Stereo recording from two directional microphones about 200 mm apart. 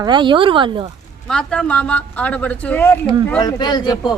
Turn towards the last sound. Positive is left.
turn(degrees=20)  # may be behind; listen again after turning